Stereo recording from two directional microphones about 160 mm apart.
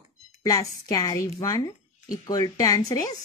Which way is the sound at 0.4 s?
20° left (ahead or behind).